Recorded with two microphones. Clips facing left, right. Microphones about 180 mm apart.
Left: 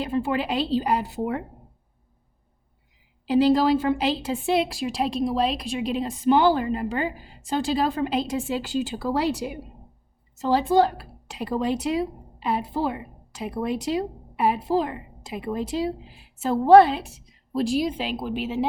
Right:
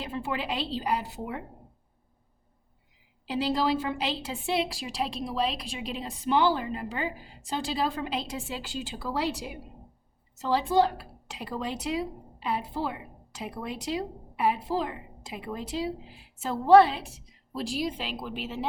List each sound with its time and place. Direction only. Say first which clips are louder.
0.0 s a woman's voice: left 8 dB; 50° left (ahead or behind)
3.2 s a woman's voice: left 8 dB; 45° left (ahead or behind)